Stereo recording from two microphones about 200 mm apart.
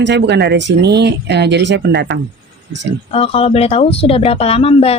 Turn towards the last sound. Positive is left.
turn(degrees=30)  # may be behind; listen again after turning